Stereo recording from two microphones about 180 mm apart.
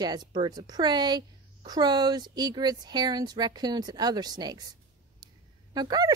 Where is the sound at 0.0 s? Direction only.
25° right (ahead or behind).